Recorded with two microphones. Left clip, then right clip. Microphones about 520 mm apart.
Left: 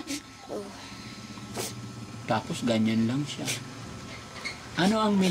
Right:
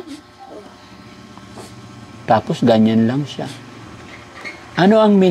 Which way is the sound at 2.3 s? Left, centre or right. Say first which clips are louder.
Right 14 dB; right.